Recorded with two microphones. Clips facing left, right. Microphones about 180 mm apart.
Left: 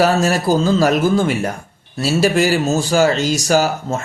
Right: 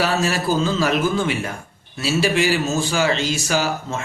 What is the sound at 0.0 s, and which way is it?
Speech, 45° left (ahead or behind).